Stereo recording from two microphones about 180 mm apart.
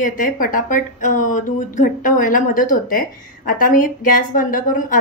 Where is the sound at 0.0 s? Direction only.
45° left (ahead or behind).